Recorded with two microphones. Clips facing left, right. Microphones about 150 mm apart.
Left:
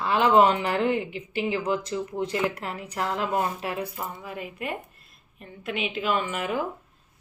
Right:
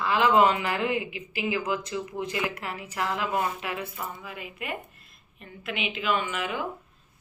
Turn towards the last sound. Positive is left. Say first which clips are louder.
# left 2 dB
turn(degrees=40)  # may be behind; listen again after turning